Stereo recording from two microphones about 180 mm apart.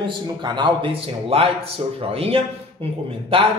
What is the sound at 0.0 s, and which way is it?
Speech, 25° right (ahead or behind).